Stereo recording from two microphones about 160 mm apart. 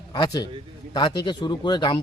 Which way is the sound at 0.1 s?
25° left (ahead or behind).